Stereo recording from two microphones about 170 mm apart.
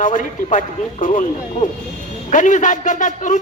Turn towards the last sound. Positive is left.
turn(degrees=50)  # may be behind; listen again after turning